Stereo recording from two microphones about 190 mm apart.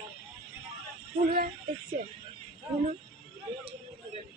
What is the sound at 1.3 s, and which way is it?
Speech, 50° right (ahead or behind).